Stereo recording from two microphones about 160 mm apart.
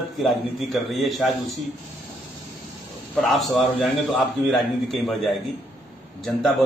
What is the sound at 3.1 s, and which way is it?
A man's voice, centre (ahead or behind).